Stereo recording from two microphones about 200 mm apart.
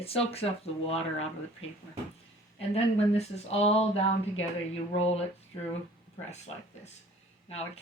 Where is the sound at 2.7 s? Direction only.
30° left (ahead or behind).